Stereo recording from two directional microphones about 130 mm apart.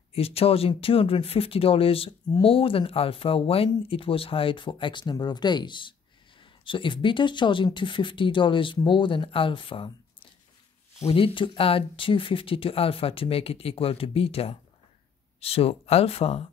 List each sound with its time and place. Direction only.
0.1 s speech: 50° left (ahead or behind)